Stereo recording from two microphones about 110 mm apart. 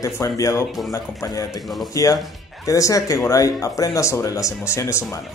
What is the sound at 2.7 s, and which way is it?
Speech, 30° left (ahead or behind).